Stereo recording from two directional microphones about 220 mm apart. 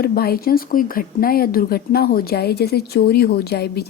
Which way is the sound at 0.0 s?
45° left (ahead or behind).